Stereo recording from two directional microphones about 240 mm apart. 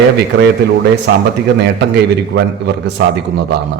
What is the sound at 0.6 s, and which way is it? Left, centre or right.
A man's voice, right.